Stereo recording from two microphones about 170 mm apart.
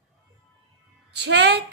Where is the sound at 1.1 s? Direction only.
80° right.